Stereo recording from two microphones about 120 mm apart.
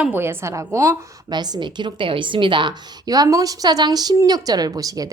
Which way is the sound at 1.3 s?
35° right (ahead or behind).